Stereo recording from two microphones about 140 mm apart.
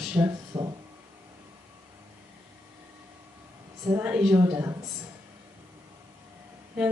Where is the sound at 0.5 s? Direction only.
25° right (ahead or behind).